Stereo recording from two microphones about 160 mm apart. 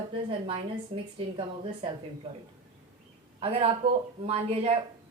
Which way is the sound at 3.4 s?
40° right (ahead or behind).